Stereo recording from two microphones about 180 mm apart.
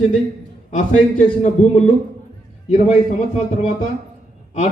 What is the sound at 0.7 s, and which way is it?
A man's voice, 40° left (ahead or behind).